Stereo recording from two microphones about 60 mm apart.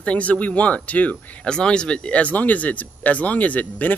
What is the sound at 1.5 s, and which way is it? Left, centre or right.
Speech, centre.